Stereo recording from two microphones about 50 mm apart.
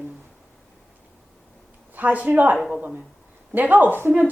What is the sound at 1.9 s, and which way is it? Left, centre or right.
Speech, right.